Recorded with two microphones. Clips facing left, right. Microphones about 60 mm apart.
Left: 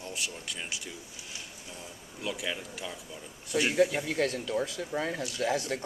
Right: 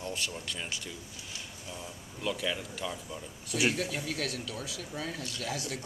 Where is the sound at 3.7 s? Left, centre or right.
Left.